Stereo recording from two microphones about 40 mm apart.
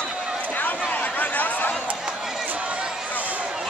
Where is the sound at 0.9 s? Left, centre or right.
Left.